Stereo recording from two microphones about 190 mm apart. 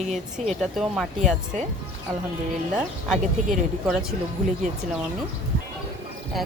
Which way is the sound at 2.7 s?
Centre (ahead or behind).